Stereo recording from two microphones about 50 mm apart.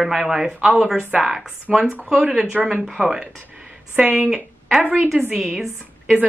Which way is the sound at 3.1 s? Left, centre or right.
Centre.